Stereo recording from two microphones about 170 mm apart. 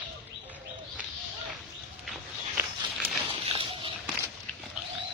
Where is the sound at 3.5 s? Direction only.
30° right (ahead or behind).